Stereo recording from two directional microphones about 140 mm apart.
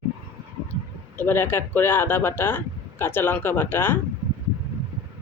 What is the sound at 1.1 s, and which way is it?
Speech, 15° left (ahead or behind).